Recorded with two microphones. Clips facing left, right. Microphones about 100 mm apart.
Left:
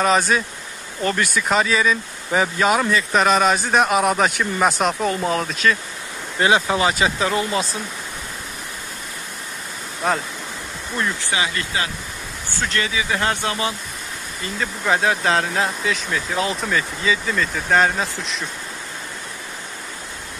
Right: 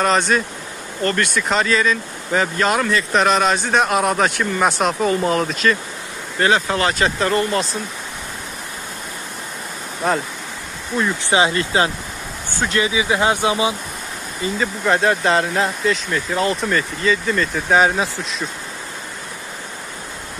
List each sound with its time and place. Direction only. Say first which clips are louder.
0.0 s speech: right 1 dB; 5° left (ahead or behind)
6.4 s speech: even; 10° left (ahead or behind)
11.2 s speech: right 7 dB; 30° right (ahead or behind)
12.5 s speech: right 4 dB; 15° right (ahead or behind)
14.6 s speech: right 2 dB; centre (ahead or behind)